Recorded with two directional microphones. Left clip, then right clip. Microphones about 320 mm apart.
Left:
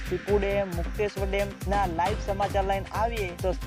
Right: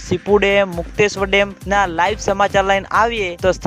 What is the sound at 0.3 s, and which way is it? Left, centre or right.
Speech, right.